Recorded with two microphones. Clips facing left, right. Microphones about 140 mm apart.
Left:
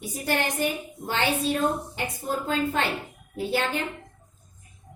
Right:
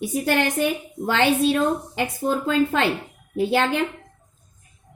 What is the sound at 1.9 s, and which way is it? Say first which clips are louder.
Speech: right 6 dB; 90° right.